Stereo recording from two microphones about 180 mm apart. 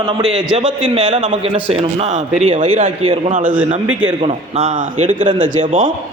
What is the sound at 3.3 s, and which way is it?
Speech, 45° right (ahead or behind).